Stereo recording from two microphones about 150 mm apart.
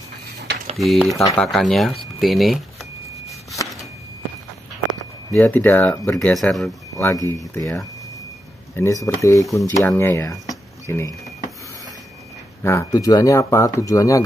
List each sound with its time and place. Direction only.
0.7 s speech: centre (ahead or behind)
5.3 s speech: 15° left (ahead or behind)
7.0 s speech: 20° left (ahead or behind)
10.5 s a sound: 20° left (ahead or behind)
12.6 s speech: 20° left (ahead or behind)